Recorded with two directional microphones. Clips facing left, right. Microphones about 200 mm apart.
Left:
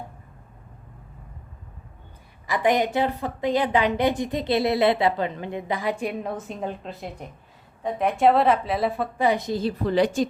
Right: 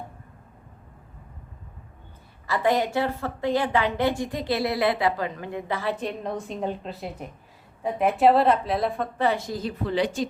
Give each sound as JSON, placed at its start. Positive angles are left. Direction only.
{"t": 2.5, "sound": "a woman's voice", "side_deg": 15}
{"t": 9.8, "sound": "a woman's voice", "side_deg": 45}